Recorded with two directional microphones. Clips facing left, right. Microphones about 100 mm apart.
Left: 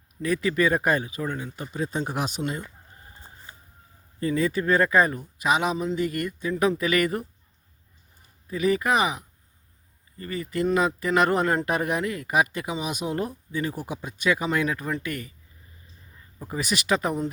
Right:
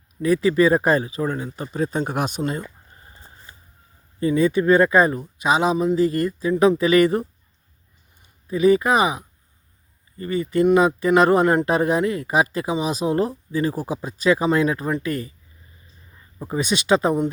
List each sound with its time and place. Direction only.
0.2 s speech: 25° right (ahead or behind); by 2.6 s 45° right (ahead or behind)
4.2 s speech: 20° right (ahead or behind)
8.4 s speech: 25° right (ahead or behind)
16.4 s speech: 25° right (ahead or behind)